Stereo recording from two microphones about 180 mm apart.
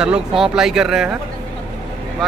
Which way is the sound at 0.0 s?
5° right (ahead or behind).